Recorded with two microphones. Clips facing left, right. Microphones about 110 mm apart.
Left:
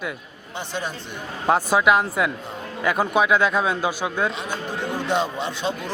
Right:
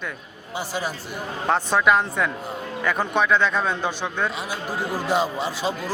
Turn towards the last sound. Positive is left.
turn(degrees=0)  # may be behind; listen again after turning